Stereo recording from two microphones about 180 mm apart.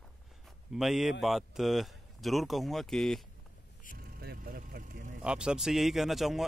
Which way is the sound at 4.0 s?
55° right (ahead or behind).